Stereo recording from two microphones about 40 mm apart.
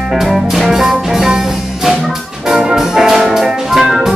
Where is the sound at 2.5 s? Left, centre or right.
Centre.